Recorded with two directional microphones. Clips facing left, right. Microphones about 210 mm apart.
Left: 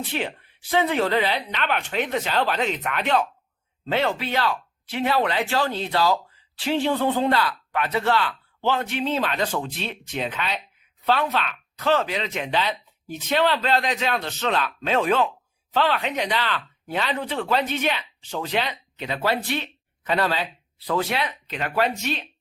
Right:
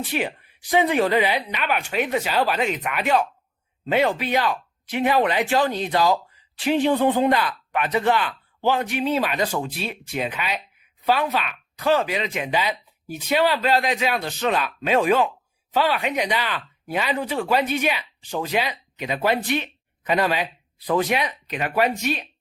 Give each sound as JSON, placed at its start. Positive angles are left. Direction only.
{"t": 0.1, "sound": "speech", "side_deg": -10}